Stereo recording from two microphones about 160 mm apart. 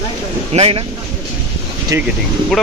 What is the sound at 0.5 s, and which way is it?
Speech, 40° right (ahead or behind).